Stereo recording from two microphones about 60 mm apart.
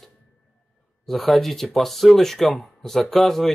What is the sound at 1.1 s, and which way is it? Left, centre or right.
Speech, centre.